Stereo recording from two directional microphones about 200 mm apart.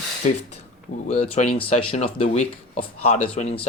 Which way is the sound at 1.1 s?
35° left (ahead or behind).